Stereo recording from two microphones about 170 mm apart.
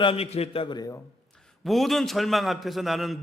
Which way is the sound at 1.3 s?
Centre (ahead or behind).